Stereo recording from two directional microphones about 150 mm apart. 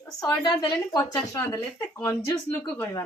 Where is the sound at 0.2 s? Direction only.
25° left (ahead or behind).